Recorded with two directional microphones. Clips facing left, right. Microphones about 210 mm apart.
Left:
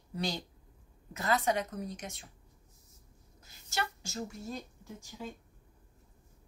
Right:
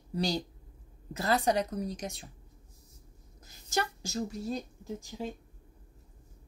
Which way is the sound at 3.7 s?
40° right (ahead or behind).